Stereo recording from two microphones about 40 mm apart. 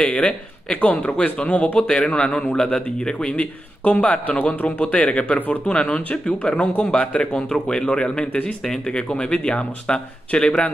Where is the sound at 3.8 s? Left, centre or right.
Left.